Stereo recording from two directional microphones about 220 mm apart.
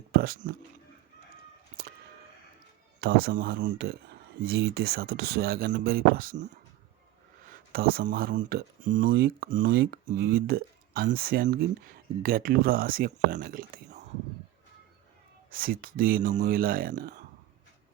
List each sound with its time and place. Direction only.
0.1 s speech: 45° right (ahead or behind)
3.0 s speech: 45° right (ahead or behind)
7.7 s speech: 45° right (ahead or behind)
15.4 s speech: 40° right (ahead or behind)